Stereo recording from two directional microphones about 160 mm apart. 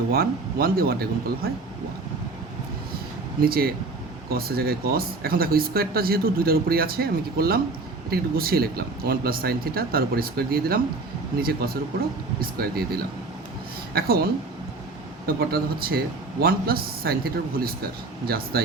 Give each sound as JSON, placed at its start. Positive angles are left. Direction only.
{"t": 0.1, "sound": "speech", "side_deg": -70}
{"t": 3.4, "sound": "speech", "side_deg": -70}
{"t": 15.3, "sound": "speech", "side_deg": -70}